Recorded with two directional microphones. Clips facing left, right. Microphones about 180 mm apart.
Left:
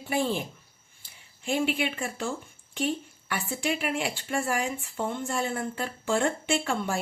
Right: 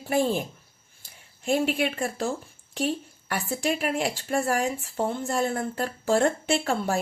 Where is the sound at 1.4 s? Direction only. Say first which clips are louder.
Right 3 dB; 40° right (ahead or behind).